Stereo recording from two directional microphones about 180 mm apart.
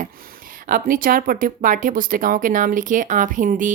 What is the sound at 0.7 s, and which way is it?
Speech, 50° right (ahead or behind).